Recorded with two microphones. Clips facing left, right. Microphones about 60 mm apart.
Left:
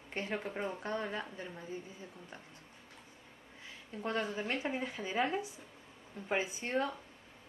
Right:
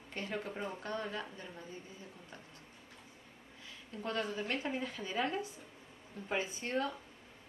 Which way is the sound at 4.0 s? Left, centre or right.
Left.